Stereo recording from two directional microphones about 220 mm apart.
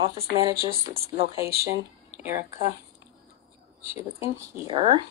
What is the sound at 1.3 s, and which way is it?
Speech, 15° right (ahead or behind).